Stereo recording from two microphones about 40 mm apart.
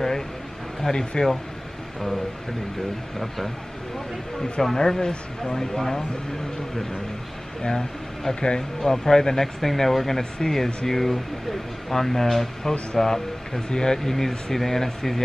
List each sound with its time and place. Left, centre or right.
0.8 s speech: left
4.4 s speech: centre
7.6 s speech: centre